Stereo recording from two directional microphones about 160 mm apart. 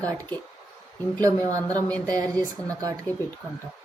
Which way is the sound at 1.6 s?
10° left (ahead or behind).